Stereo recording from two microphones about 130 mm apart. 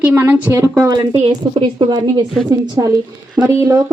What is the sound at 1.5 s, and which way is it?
A woman's voice, 40° right (ahead or behind).